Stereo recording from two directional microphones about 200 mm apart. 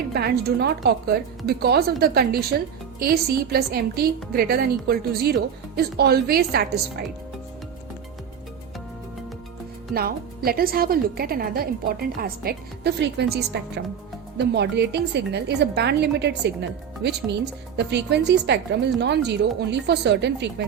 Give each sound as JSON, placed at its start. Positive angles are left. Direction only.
{"t": 0.1, "sound": "speech", "side_deg": -55}
{"t": 9.9, "sound": "a woman's voice", "side_deg": -50}